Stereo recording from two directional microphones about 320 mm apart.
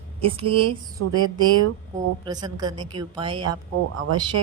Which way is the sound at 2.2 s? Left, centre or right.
Centre.